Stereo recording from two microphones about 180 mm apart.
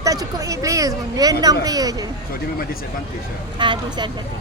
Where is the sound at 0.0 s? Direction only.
20° right (ahead or behind).